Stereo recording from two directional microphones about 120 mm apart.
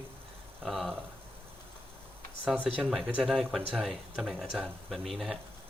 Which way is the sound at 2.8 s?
5° right (ahead or behind).